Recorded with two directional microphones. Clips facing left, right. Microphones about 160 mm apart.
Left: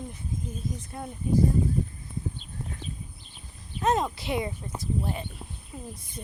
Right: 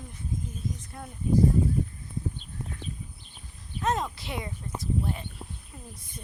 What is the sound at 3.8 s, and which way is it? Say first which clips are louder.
Speech: left 4 dB; 20° left (ahead or behind).